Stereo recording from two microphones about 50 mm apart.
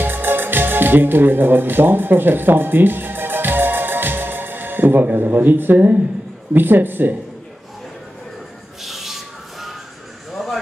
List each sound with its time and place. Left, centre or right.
0.0 s music: right
6.5 s speech: right
8.8 s a sound: centre
10.3 s vehicle: centre